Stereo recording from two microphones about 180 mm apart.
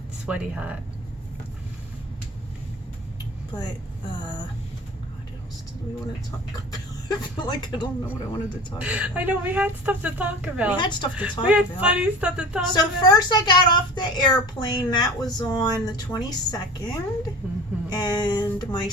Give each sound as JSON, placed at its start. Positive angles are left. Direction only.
{"t": 0.3, "sound": "speech", "side_deg": -5}
{"t": 4.2, "sound": "a woman's voice", "side_deg": 25}
{"t": 6.7, "sound": "speech", "side_deg": 25}
{"t": 8.1, "sound": "speech", "side_deg": -5}
{"t": 10.8, "sound": "a woman's voice", "side_deg": 25}
{"t": 11.1, "sound": "speech", "side_deg": -10}
{"t": 12.7, "sound": "a woman's voice", "side_deg": 20}